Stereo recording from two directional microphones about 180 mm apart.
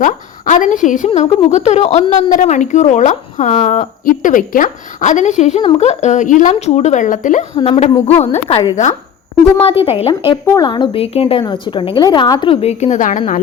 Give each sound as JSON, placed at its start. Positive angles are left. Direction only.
{"t": 0.0, "sound": "a woman's voice", "side_deg": 45}
{"t": 9.8, "sound": "a woman's voice", "side_deg": 35}
{"t": 10.4, "sound": "a woman's voice", "side_deg": 20}